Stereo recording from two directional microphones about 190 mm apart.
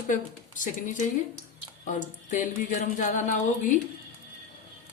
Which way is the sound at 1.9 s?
40° left (ahead or behind).